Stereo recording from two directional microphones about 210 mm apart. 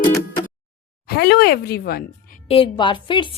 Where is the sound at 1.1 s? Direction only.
50° left (ahead or behind).